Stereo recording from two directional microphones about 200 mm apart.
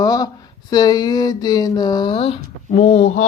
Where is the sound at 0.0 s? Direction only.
20° left (ahead or behind).